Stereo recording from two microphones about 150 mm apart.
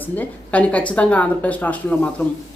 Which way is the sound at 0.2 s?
10° left (ahead or behind).